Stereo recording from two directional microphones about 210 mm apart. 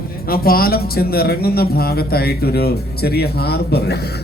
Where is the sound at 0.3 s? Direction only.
45° left (ahead or behind).